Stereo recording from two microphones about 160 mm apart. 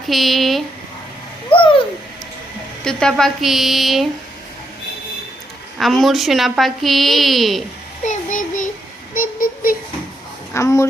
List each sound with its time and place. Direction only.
0.1 s a woman's voice: centre (ahead or behind)
1.5 s a sound: 35° left (ahead or behind)
2.8 s a woman's voice: 5° left (ahead or behind)
5.7 s a woman's voice: centre (ahead or behind)
8.0 s child singing: 50° left (ahead or behind)
9.1 s a sound: 60° left (ahead or behind)
10.5 s a woman's voice: 15° left (ahead or behind)